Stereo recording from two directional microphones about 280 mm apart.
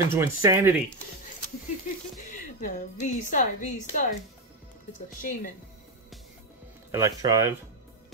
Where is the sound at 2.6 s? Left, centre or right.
Left.